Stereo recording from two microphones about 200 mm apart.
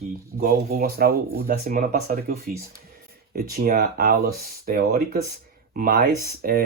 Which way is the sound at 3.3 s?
45° right (ahead or behind).